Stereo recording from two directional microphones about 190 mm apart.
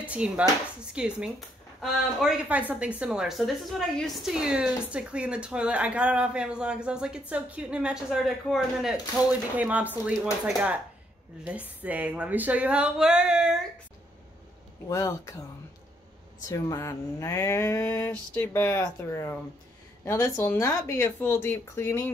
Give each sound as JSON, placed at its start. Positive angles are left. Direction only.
{"t": 0.1, "sound": "a woman's voice", "side_deg": -5}
{"t": 14.9, "sound": "speech", "side_deg": 15}
{"t": 16.4, "sound": "speech", "side_deg": 20}